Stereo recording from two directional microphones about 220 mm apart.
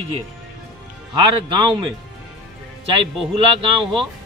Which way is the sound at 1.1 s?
20° right (ahead or behind).